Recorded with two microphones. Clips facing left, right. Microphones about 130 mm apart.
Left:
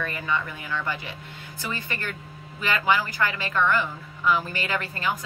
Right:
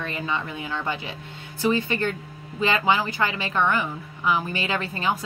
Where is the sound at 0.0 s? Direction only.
25° right (ahead or behind).